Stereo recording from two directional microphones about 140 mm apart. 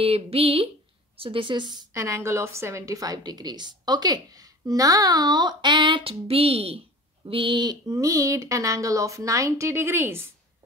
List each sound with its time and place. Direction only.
0.0 s speech: 45° right (ahead or behind)
2.0 s a woman's voice: 20° right (ahead or behind)